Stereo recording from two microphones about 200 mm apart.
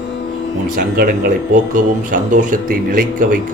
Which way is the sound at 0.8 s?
45° right (ahead or behind).